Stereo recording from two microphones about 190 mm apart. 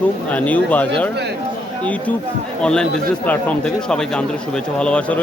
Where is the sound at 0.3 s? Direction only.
5° left (ahead or behind).